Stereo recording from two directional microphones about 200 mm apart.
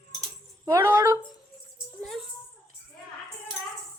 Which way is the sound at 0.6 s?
15° right (ahead or behind).